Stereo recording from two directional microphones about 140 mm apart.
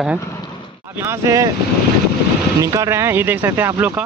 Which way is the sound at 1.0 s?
20° right (ahead or behind).